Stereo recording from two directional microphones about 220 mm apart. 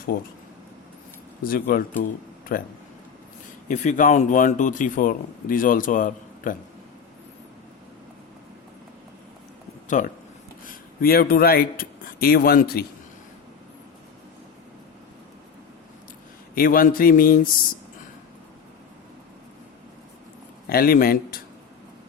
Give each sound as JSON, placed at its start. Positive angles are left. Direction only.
{"t": 1.5, "sound": "a man's voice", "side_deg": 40}
{"t": 3.7, "sound": "a man's voice", "side_deg": 35}
{"t": 10.0, "sound": "a man's voice", "side_deg": 35}
{"t": 16.6, "sound": "a man's voice", "side_deg": 40}
{"t": 20.7, "sound": "speech", "side_deg": 40}